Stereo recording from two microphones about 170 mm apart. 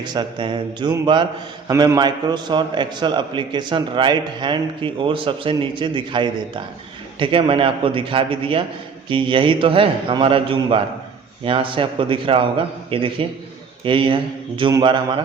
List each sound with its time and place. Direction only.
0.0 s a man's voice: 25° right (ahead or behind)